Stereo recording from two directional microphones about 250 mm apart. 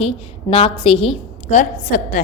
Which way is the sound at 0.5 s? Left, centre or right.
Left.